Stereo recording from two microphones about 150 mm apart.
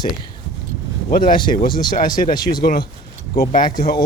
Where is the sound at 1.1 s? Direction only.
70° left (ahead or behind).